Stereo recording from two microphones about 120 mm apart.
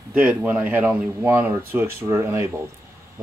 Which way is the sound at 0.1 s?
10° right (ahead or behind).